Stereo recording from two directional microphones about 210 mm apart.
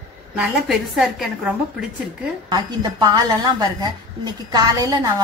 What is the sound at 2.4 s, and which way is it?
A woman's voice, 20° right (ahead or behind).